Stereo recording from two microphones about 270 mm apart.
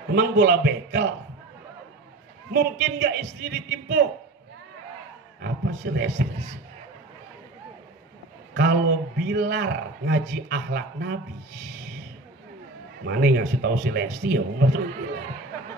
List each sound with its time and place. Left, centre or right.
0.1 s a man's voice: right
2.5 s a man's voice: right
5.4 s a man's voice: right
8.5 s a man's voice: right
13.0 s a man's voice: right